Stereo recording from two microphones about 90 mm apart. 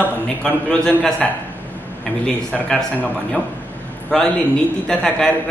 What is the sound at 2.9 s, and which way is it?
A man's voice, 15° left (ahead or behind).